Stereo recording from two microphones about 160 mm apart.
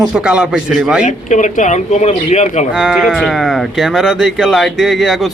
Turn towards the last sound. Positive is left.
turn(degrees=0)  # may be behind; listen again after turning